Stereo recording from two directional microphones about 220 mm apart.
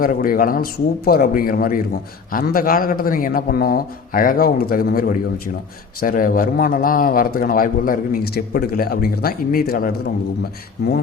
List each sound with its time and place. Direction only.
0.0 s a man's voice: 40° left (ahead or behind)